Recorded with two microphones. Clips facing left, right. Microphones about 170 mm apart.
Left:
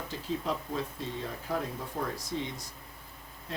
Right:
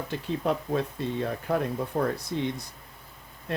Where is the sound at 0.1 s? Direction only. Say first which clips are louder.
Right 5 dB; 60° right (ahead or behind).